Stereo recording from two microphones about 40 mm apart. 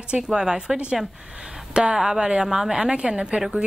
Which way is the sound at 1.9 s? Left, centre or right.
Centre.